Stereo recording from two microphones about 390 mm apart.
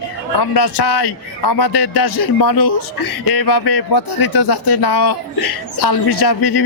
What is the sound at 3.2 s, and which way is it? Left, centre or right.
A man's voice, left.